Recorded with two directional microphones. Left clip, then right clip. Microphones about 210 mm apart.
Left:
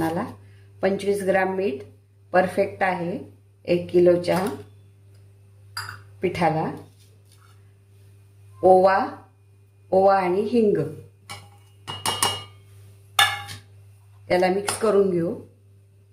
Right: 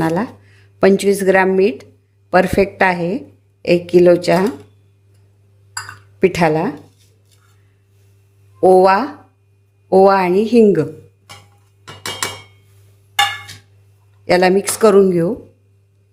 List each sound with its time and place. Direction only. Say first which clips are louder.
0.0 s speech: right 8 dB; 55° right (ahead or behind)
6.1 s speech: right 8 dB; 55° right (ahead or behind)
8.6 s speech: right 6 dB; 50° right (ahead or behind)
14.3 s speech: right 8 dB; 55° right (ahead or behind)